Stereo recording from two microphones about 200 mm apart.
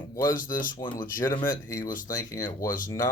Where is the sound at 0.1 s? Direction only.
15° left (ahead or behind).